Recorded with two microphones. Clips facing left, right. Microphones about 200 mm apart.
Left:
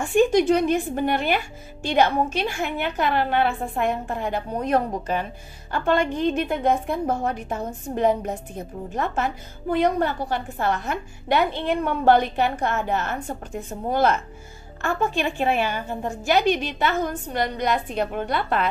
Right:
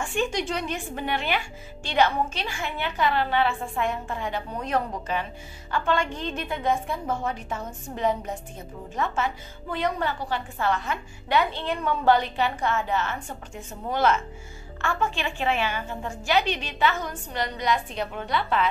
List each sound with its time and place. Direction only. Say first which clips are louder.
0.0 s a woman's voice: left 9 dB; 50° left (ahead or behind)
8.9 s a woman's voice: left 2 dB; 45° left (ahead or behind)